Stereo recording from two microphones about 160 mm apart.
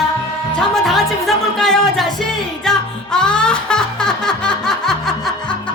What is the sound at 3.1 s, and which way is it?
Music, 5° left (ahead or behind).